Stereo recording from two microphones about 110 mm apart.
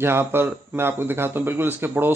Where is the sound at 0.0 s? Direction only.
20° right (ahead or behind).